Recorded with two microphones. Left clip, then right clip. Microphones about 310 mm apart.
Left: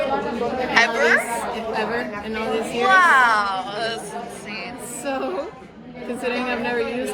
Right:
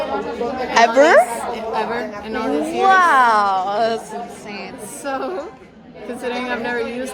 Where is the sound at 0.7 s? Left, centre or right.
Centre.